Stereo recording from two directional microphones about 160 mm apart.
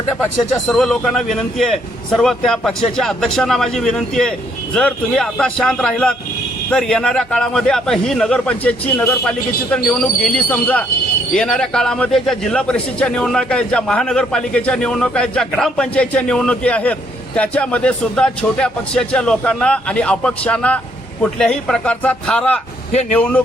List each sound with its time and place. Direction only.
0.5 s a man's voice: 5° left (ahead or behind)
22.9 s speech: 50° left (ahead or behind)
23.1 s a man's voice: 10° left (ahead or behind)